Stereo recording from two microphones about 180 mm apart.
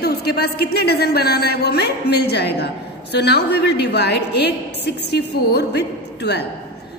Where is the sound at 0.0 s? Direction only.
60° left (ahead or behind).